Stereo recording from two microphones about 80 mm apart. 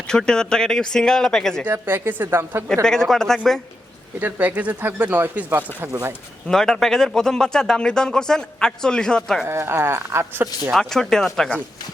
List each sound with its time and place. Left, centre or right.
0.1 s speech: centre
1.6 s speech: right
2.8 s speech: centre
4.2 s speech: centre
6.5 s speech: centre
9.5 s speech: right
10.8 s speech: centre